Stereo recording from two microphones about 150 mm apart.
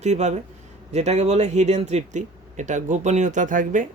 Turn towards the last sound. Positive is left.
turn(degrees=-60)  # may be behind; listen again after turning